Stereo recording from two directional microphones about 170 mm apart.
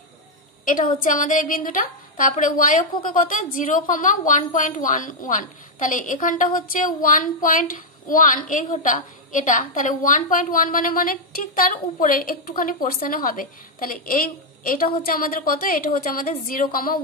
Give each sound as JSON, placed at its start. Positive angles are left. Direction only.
{"t": 0.7, "sound": "a woman's voice", "side_deg": 55}